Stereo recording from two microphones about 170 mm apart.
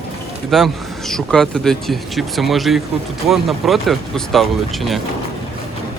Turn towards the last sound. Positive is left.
turn(degrees=0)  # may be behind; listen again after turning